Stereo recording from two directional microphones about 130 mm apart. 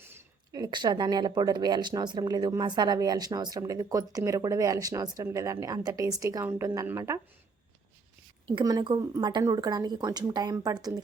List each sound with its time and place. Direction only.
0.0 s a sound: 20° right (ahead or behind)
0.6 s speech: 30° right (ahead or behind)
8.5 s speech: 35° right (ahead or behind)